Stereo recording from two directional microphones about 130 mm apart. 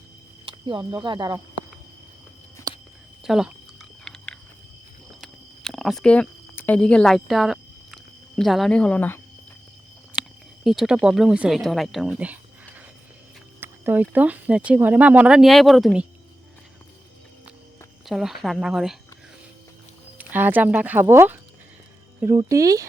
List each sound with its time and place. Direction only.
0.4 s speech: 40° right (ahead or behind)
2.7 s whispering: 30° right (ahead or behind)
3.2 s a sound: 5° right (ahead or behind)
6.6 s speech: 10° left (ahead or behind)
10.2 s speech: centre (ahead or behind)
18.0 s speech: centre (ahead or behind)
20.1 s speech: 15° right (ahead or behind)
22.4 s speech: 25° right (ahead or behind)